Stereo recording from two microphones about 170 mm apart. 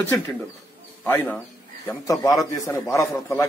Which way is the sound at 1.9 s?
20° left (ahead or behind).